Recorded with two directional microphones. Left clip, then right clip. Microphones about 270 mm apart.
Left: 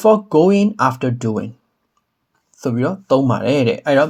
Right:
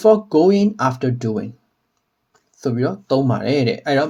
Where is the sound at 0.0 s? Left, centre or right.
Centre.